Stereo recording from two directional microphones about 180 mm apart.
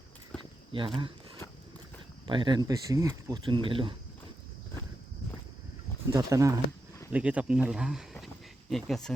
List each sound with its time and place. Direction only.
0.3 s a sound: 5° left (ahead or behind)
0.7 s speech: 30° right (ahead or behind)
2.2 s speech: 25° right (ahead or behind)
6.1 s speech: 15° right (ahead or behind); by 9.1 s centre (ahead or behind)